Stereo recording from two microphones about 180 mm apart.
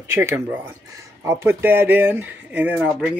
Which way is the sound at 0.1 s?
15° right (ahead or behind).